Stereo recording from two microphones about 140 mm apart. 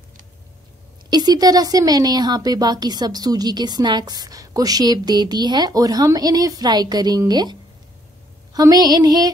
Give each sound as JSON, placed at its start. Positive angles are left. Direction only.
{"t": 1.1, "sound": "a woman's voice", "side_deg": -30}
{"t": 8.5, "sound": "a woman's voice", "side_deg": -30}